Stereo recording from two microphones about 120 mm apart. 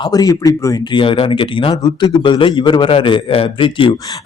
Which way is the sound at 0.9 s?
45° left (ahead or behind).